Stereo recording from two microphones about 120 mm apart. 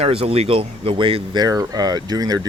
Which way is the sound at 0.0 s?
55° right (ahead or behind).